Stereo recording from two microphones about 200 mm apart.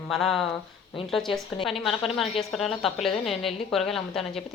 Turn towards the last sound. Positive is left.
turn(degrees=0)  # may be behind; listen again after turning